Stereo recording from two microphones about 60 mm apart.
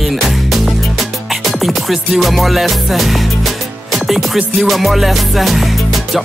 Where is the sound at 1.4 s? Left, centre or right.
Centre.